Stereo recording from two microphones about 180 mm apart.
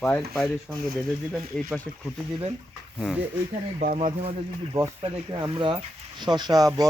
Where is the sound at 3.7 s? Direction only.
45° right (ahead or behind).